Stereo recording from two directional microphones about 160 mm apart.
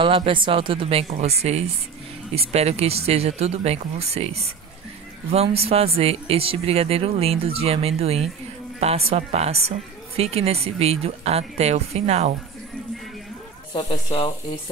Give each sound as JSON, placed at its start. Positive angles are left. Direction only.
{"t": 0.0, "sound": "speech", "side_deg": -35}
{"t": 13.7, "sound": "speech", "side_deg": 30}